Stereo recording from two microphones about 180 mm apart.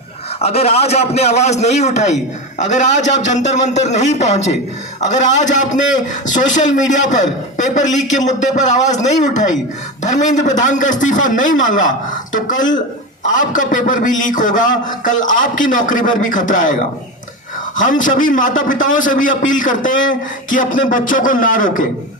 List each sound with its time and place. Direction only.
0.4 s a man's voice: 35° left (ahead or behind)
17.7 s a man's voice: 45° left (ahead or behind)